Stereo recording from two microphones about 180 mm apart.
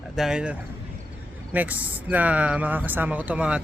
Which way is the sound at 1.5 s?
10° right (ahead or behind).